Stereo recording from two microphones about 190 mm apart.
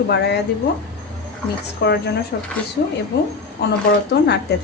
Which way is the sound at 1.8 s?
60° left (ahead or behind).